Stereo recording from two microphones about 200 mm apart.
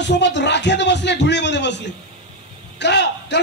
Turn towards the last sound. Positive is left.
turn(degrees=60)  # may be behind; listen again after turning